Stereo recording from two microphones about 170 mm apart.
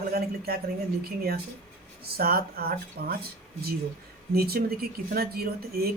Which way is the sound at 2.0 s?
65° right (ahead or behind).